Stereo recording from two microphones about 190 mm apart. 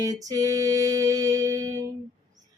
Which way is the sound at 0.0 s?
20° right (ahead or behind).